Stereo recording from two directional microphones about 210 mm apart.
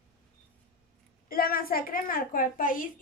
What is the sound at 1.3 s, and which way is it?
A woman's voice, 45° left (ahead or behind).